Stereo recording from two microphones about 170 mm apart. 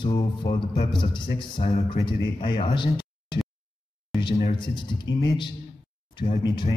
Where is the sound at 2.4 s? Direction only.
30° left (ahead or behind).